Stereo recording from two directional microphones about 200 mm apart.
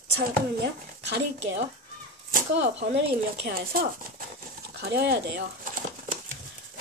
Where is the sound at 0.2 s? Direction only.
55° right (ahead or behind).